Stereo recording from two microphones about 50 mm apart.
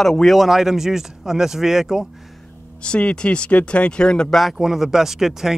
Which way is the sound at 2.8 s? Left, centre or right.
Left.